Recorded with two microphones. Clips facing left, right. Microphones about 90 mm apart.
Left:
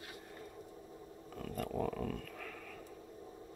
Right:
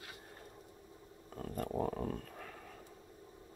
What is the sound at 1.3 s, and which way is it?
Dog, 30° right (ahead or behind).